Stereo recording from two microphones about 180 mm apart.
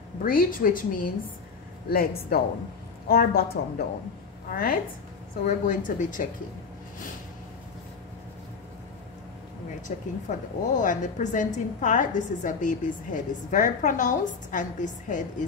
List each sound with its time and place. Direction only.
0.2 s a woman's voice: 50° left (ahead or behind)
5.4 s a woman's voice: 45° left (ahead or behind)
9.8 s a woman's voice: 45° left (ahead or behind)